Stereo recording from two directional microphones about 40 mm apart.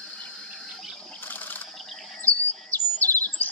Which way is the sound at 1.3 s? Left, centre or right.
Left.